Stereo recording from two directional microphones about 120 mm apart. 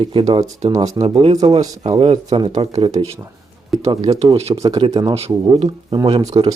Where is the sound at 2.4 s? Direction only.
60° right (ahead or behind).